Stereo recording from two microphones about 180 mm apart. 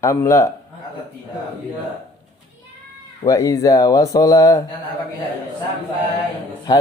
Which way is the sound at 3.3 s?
20° left (ahead or behind).